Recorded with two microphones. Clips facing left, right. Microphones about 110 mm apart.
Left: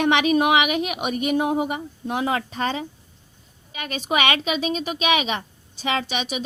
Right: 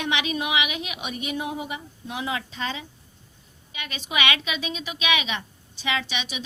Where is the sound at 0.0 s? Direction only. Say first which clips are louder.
Left 9 dB; 50° left (ahead or behind).